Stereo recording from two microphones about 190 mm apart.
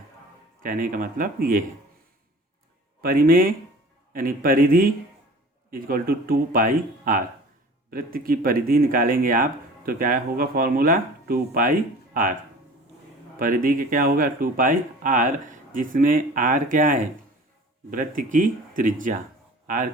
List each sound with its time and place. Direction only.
0.6 s speech: 45° right (ahead or behind)
3.0 s speech: 50° right (ahead or behind)
13.4 s speech: 45° right (ahead or behind)